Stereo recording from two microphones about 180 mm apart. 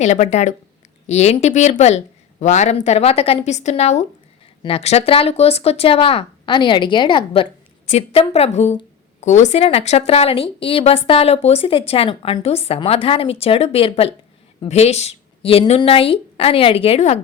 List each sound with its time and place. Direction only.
0.0 s a woman's voice: 40° left (ahead or behind)